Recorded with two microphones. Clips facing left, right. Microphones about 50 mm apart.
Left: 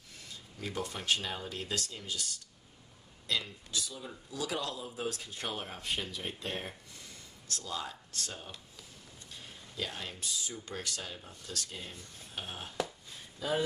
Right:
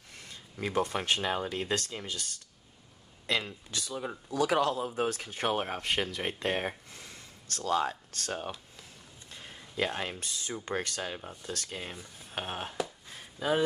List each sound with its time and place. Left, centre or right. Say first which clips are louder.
0.7 s speech: right 5 dB; right
3.3 s speech: right 4 dB; right
9.8 s speech: right 6 dB; right